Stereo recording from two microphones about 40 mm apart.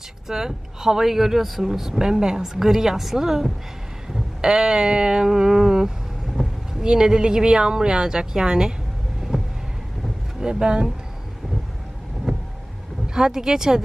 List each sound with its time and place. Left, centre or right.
0.3 s speech: centre
9.3 s a sound: centre
10.4 s speech: right
12.3 s vehicle: centre
13.0 s speech: centre